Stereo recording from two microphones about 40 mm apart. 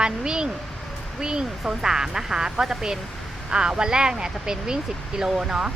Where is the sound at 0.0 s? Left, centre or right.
Right.